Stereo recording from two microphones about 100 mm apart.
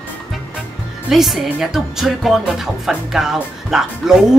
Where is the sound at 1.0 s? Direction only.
Centre (ahead or behind).